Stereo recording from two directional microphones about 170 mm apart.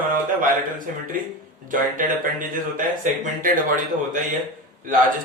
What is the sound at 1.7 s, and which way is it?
Speech, 50° right (ahead or behind).